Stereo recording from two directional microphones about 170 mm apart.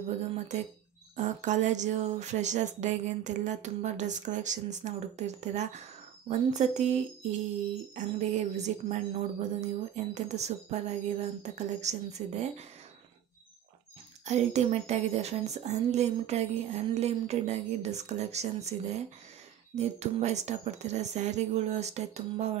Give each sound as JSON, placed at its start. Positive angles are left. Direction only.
{"t": 1.1, "sound": "a woman's voice", "side_deg": -45}
{"t": 14.2, "sound": "a woman's voice", "side_deg": -40}